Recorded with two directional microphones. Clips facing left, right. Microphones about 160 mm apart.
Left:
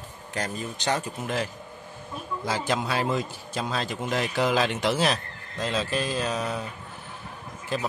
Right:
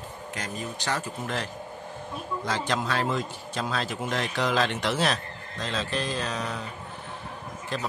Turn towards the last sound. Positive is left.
turn(degrees=5)  # may be behind; listen again after turning